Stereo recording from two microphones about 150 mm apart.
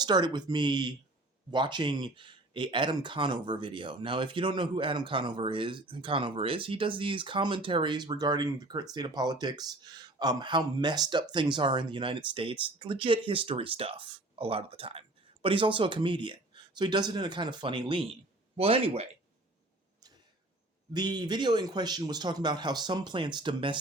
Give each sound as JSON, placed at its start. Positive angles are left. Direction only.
{"t": 0.0, "sound": "speech", "side_deg": -30}
{"t": 20.9, "sound": "speech", "side_deg": -30}